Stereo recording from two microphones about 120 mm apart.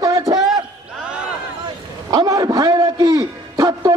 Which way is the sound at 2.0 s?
30° right (ahead or behind).